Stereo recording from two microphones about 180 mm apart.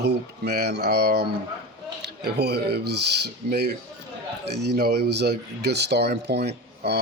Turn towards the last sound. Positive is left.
turn(degrees=-65)  # may be behind; listen again after turning